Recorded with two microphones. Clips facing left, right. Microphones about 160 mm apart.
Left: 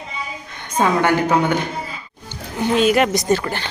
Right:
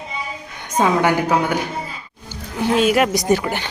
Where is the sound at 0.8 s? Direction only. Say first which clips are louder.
Even; 10° right (ahead or behind).